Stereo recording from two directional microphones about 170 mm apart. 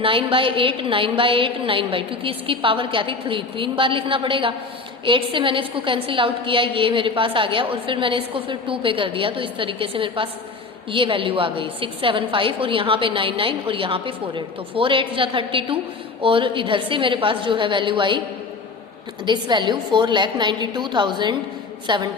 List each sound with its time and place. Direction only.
0.0 s a woman's voice: 30° right (ahead or behind)
19.2 s a woman's voice: 25° right (ahead or behind)